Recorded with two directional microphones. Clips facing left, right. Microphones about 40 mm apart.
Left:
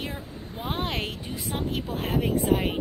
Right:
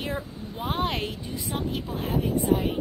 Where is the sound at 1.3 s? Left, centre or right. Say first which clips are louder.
Right 1 dB; left.